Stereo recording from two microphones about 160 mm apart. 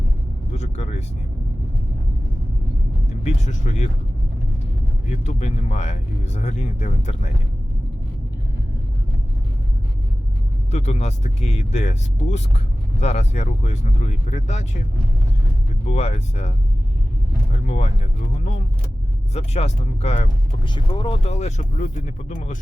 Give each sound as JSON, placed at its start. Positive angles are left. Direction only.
{"t": 0.5, "sound": "speech", "side_deg": 45}
{"t": 3.1, "sound": "speech", "side_deg": 45}
{"t": 5.0, "sound": "speech", "side_deg": 50}
{"t": 10.7, "sound": "speech", "side_deg": 45}
{"t": 15.9, "sound": "speech", "side_deg": 45}
{"t": 20.7, "sound": "speech", "side_deg": 30}
{"t": 21.2, "sound": "speech", "side_deg": 45}